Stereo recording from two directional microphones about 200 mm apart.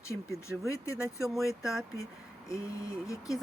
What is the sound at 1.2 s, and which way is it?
Speech, centre (ahead or behind).